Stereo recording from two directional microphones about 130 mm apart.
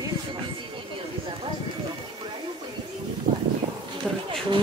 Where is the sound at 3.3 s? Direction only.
70° right (ahead or behind).